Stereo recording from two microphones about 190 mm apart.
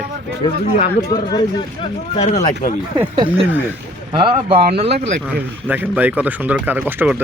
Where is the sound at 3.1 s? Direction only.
25° right (ahead or behind).